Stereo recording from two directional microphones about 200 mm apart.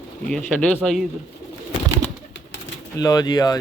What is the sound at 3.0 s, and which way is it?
Speech, 20° left (ahead or behind).